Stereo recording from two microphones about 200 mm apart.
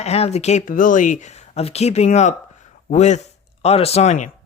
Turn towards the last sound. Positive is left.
turn(degrees=35)  # may be behind; listen again after turning